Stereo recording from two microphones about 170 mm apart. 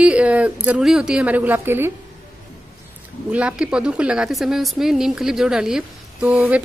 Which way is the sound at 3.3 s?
5° right (ahead or behind).